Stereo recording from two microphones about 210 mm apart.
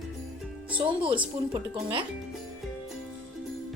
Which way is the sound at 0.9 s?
25° right (ahead or behind).